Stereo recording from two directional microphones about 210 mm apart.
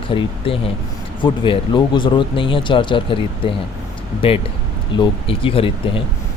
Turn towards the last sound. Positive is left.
turn(degrees=25)  # may be behind; listen again after turning